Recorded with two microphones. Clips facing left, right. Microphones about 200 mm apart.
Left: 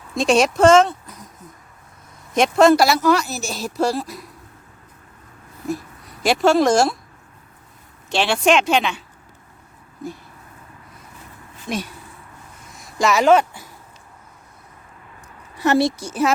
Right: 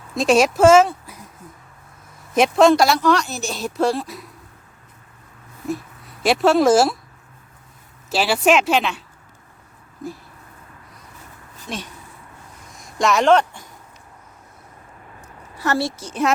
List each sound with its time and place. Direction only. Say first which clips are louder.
0.1 s speech: right 1 dB; centre (ahead or behind)
2.3 s a woman's voice: even; centre (ahead or behind)
5.6 s speech: even; centre (ahead or behind)
8.1 s a woman's voice: even; 5° right (ahead or behind)
11.7 s a woman's voice: left 5 dB; 15° left (ahead or behind)
12.7 s speech: even; centre (ahead or behind)
15.5 s a woman's voice: left 5 dB; 20° left (ahead or behind)